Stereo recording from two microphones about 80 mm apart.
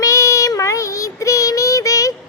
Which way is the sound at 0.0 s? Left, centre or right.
Left.